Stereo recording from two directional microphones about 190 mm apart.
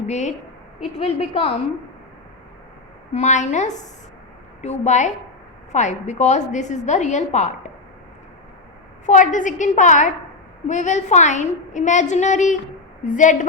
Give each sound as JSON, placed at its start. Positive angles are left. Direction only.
{"t": 0.1, "sound": "a woman's voice", "side_deg": 35}
{"t": 3.1, "sound": "a woman's voice", "side_deg": 35}
{"t": 9.0, "sound": "a woman's voice", "side_deg": 40}